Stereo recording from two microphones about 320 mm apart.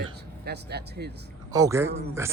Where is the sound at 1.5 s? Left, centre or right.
Centre.